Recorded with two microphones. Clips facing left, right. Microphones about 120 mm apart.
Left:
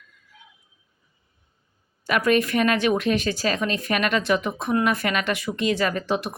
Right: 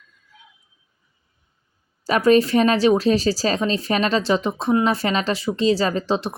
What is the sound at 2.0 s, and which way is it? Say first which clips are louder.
Speech: right 5 dB; 30° right (ahead or behind).